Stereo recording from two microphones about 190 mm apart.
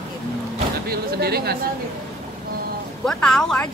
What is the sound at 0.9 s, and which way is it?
Speech, 55° right (ahead or behind).